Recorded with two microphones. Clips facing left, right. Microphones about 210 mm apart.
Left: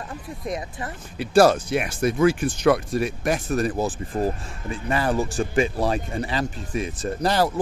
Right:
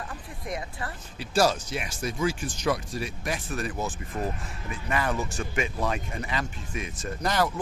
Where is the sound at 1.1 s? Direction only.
60° left (ahead or behind).